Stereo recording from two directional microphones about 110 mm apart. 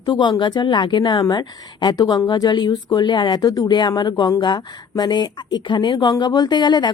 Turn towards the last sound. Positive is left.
turn(degrees=45)  # may be behind; listen again after turning